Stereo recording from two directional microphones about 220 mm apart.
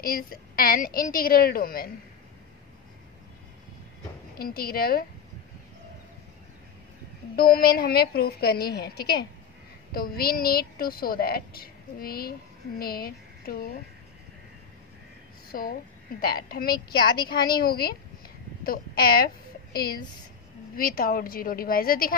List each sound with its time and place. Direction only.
0.0 s a woman's voice: 40° left (ahead or behind)
4.4 s a woman's voice: 45° left (ahead or behind)
7.3 s a woman's voice: 45° left (ahead or behind)
15.5 s a woman's voice: 40° left (ahead or behind)